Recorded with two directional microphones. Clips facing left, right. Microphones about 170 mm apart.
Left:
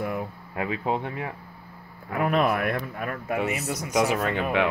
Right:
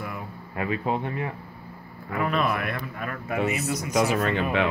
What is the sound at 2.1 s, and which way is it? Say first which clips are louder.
Speech: left 2 dB; 55° left (ahead or behind).